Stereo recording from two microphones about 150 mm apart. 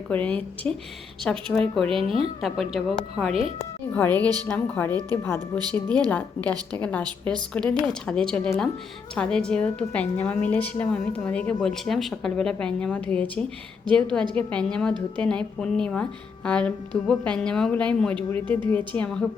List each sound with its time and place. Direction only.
0.1 s a woman's voice: 10° left (ahead or behind)
2.0 s a woman's voice: 40° right (ahead or behind)
2.4 s a woman's voice: centre (ahead or behind)
6.1 s a woman's voice: 10° left (ahead or behind)